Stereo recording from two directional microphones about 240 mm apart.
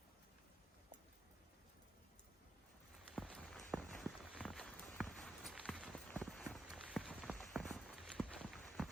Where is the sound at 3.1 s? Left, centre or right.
Centre.